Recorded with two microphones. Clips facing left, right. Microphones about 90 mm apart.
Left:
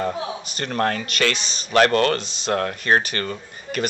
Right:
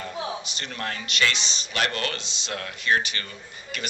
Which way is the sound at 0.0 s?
45° left (ahead or behind).